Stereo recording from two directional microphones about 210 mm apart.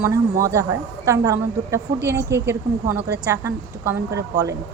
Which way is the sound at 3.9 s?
15° right (ahead or behind).